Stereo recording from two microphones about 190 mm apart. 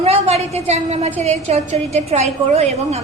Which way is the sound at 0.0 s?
30° right (ahead or behind).